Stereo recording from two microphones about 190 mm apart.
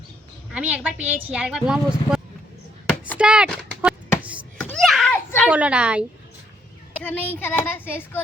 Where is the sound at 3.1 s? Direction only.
5° right (ahead or behind).